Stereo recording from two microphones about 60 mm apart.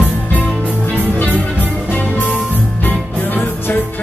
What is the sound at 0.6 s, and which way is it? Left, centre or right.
Music, right.